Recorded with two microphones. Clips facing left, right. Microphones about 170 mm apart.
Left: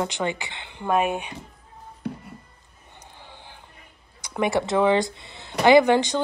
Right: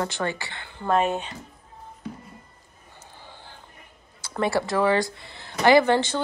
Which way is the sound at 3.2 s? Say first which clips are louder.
Even; 15° left (ahead or behind).